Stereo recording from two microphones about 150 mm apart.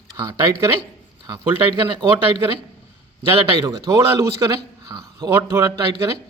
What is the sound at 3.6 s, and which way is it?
A man's voice, 25° right (ahead or behind).